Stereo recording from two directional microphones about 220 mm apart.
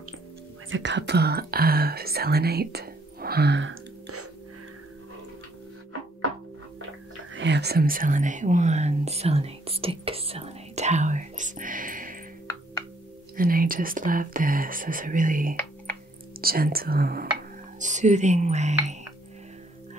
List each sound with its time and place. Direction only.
0.7 s speech: 55° right (ahead or behind)
7.3 s speech: 55° right (ahead or behind)
13.4 s speech: 40° right (ahead or behind)